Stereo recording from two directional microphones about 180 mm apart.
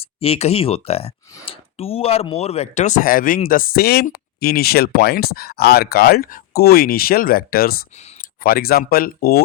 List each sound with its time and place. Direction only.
0.2 s speech: 35° left (ahead or behind); by 9.4 s 55° left (ahead or behind)